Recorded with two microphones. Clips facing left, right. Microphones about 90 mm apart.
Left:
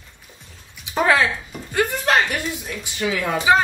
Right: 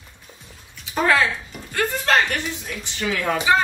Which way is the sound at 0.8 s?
15° left (ahead or behind).